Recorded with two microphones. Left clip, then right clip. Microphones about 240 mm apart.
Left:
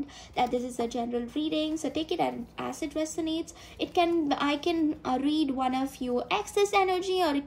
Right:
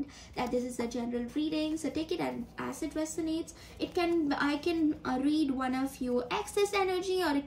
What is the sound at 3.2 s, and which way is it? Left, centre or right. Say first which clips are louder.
A woman's voice: left 3 dB; centre.